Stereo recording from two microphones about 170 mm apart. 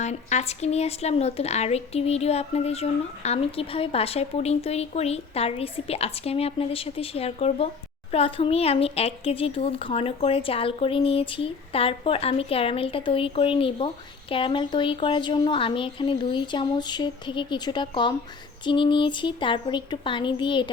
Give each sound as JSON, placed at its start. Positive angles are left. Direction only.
{"t": 0.0, "sound": "a child's voice", "side_deg": 40}